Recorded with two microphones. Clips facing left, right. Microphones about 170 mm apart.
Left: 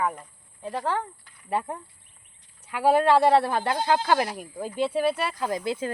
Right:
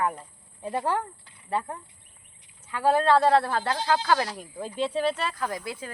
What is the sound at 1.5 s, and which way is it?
Speech, 15° left (ahead or behind).